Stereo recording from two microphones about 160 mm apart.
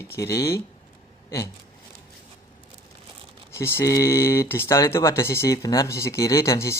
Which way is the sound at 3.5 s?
15° left (ahead or behind).